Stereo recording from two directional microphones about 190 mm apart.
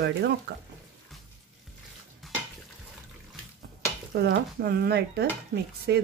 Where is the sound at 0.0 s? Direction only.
65° right (ahead or behind).